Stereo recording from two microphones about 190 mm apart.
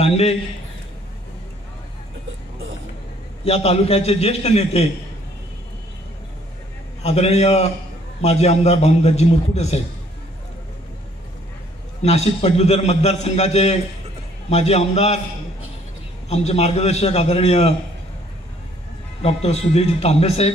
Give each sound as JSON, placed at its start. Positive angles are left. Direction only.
{"t": 0.0, "sound": "a man's voice", "side_deg": 30}
{"t": 3.4, "sound": "a man's voice", "side_deg": 35}
{"t": 7.0, "sound": "a man's voice", "side_deg": 35}
{"t": 12.0, "sound": "a man's voice", "side_deg": 35}
{"t": 16.3, "sound": "a man's voice", "side_deg": 35}
{"t": 19.2, "sound": "a man's voice", "side_deg": 35}